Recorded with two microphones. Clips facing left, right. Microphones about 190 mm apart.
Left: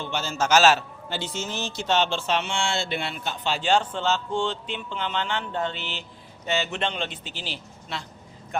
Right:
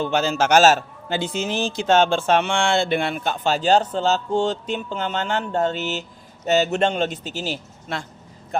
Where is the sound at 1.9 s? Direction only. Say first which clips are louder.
Right 7 dB; 50° right (ahead or behind).